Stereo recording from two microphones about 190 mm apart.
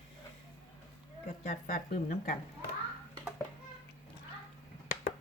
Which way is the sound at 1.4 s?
45° left (ahead or behind).